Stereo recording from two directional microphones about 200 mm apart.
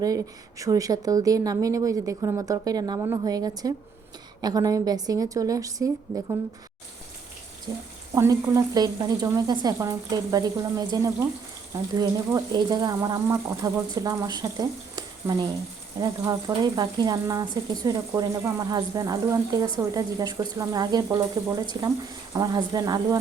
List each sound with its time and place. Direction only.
0.6 s speech: 15° right (ahead or behind)
7.7 s speech: 20° right (ahead or behind)